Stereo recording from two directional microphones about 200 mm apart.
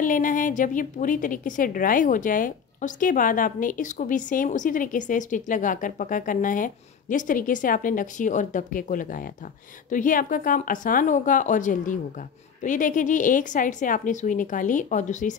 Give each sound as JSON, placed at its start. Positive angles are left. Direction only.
{"t": 0.0, "sound": "a woman's voice", "side_deg": 40}